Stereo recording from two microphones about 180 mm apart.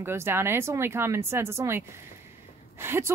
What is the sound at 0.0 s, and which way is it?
A woman's voice, 15° right (ahead or behind).